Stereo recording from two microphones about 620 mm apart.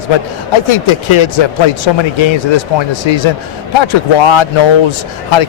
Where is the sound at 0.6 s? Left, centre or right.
Left.